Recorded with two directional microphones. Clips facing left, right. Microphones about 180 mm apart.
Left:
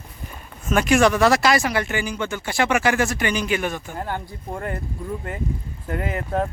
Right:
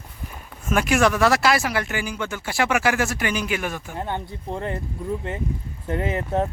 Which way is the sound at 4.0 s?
20° right (ahead or behind).